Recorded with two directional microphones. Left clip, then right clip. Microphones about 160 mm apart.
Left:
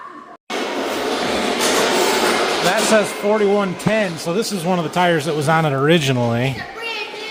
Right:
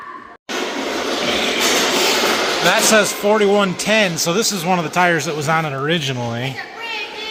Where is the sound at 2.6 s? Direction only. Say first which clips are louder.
Right 4 dB; 5° right (ahead or behind).